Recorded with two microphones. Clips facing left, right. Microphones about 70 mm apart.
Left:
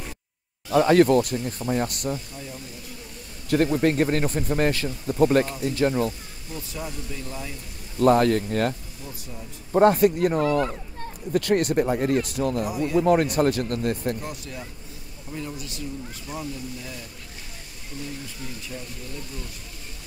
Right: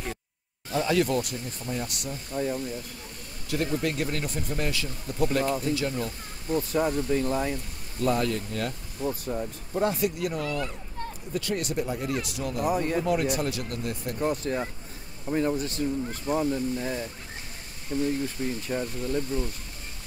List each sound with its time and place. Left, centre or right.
0.7 s speech: left
2.3 s speech: right
3.4 s speech: left
6.5 s speech: right
8.0 s speech: left
9.0 s speech: right
9.7 s speech: left
11.3 s speech: left
12.6 s speech: right
13.0 s speech: left
14.2 s speech: right